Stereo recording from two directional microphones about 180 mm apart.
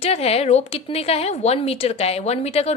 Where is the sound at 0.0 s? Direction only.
35° left (ahead or behind).